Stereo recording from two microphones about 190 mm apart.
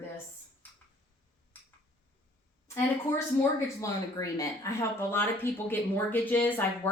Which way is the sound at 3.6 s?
15° left (ahead or behind).